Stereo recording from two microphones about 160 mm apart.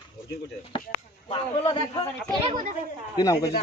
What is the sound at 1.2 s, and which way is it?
Speech, 35° left (ahead or behind).